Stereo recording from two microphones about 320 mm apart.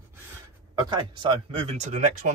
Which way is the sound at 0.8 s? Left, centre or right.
Centre.